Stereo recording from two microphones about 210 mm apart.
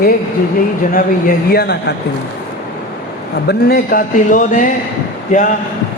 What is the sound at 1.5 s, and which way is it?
Speech, 50° left (ahead or behind).